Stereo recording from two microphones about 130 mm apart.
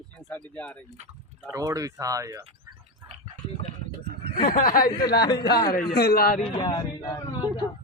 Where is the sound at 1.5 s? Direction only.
25° right (ahead or behind).